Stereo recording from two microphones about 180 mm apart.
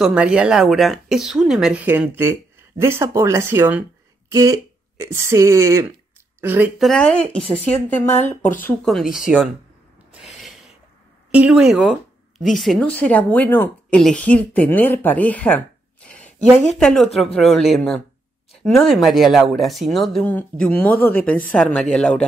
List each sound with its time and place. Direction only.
0.0 s speech: 5° right (ahead or behind)
6.8 s speech: 5° left (ahead or behind)
10.2 s a sound: centre (ahead or behind)
11.3 s speech: 5° right (ahead or behind)